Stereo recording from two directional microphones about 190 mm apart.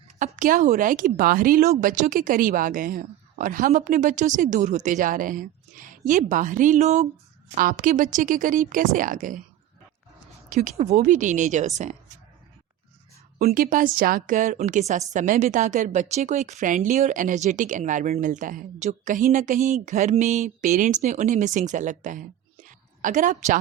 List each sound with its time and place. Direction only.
0.2 s speech: 45° right (ahead or behind)
10.5 s a woman's voice: 40° right (ahead or behind)
13.4 s a woman's voice: 45° right (ahead or behind)